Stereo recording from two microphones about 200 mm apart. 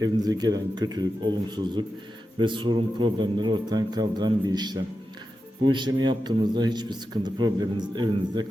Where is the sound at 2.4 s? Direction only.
25° right (ahead or behind).